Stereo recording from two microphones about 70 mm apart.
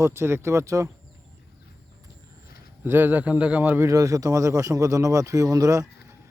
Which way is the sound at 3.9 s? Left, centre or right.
Right.